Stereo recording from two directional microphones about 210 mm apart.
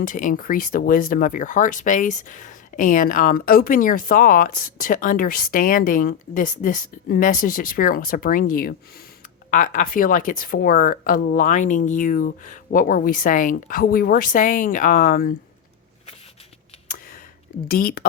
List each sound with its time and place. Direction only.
0.0 s speech: 40° left (ahead or behind)
17.7 s speech: 45° left (ahead or behind)